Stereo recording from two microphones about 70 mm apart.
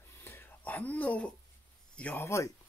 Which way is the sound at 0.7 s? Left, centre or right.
Left.